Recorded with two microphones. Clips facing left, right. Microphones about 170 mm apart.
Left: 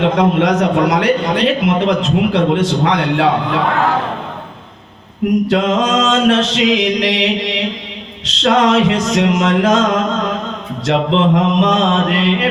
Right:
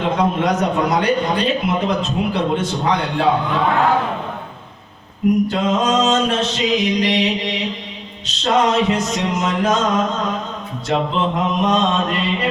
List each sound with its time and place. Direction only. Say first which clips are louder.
0.2 s a man's voice: left 4 dB; 90° left
5.5 s a man's voice: left 3 dB; 90° left